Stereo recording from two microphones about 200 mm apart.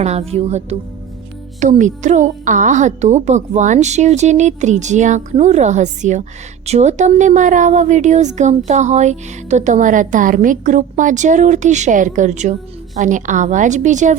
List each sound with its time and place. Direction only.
0.0 s a woman's voice: 30° right (ahead or behind)